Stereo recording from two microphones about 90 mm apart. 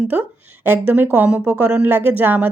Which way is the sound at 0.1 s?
20° right (ahead or behind).